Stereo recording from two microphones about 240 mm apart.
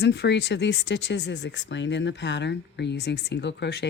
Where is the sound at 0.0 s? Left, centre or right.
Left.